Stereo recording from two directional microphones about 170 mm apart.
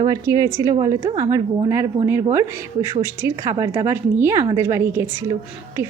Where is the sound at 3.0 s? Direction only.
15° right (ahead or behind).